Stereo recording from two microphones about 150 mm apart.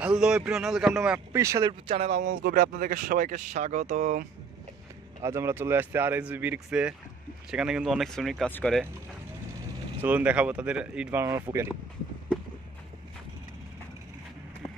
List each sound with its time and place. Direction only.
0.0 s speech: 5° right (ahead or behind)
1.3 s speech: 20° right (ahead or behind)
1.9 s speech: 45° right (ahead or behind)
2.3 s speech: 75° right (ahead or behind); by 4.3 s 55° right (ahead or behind)
5.2 s speech: 20° right (ahead or behind); by 8.5 s centre (ahead or behind)
8.5 s speech: 10° left (ahead or behind)
10.0 s speech: 10° right (ahead or behind)